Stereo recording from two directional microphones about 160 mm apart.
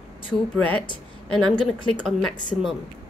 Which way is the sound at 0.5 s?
10° left (ahead or behind).